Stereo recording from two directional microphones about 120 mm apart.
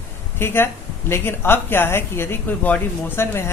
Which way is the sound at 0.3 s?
20° left (ahead or behind).